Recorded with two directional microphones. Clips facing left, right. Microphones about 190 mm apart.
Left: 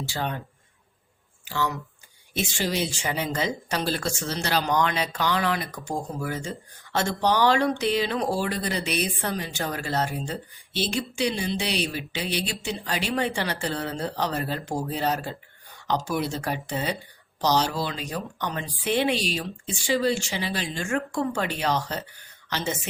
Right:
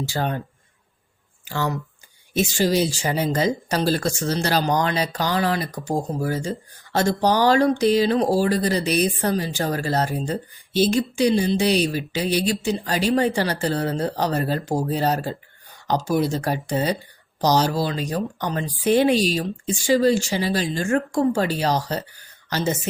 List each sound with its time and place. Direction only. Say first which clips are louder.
0.1 s speech: right 4 dB; 45° right (ahead or behind)
1.5 s a woman's voice: right 3 dB; 45° right (ahead or behind)